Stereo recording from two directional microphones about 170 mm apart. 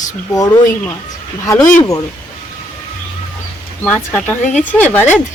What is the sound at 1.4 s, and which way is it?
Speech, 20° left (ahead or behind).